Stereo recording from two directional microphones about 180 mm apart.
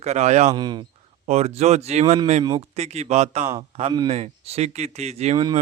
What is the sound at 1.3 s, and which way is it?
Speech, 35° right (ahead or behind).